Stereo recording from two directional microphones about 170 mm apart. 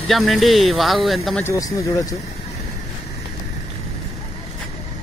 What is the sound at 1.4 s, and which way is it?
Speech, 20° left (ahead or behind).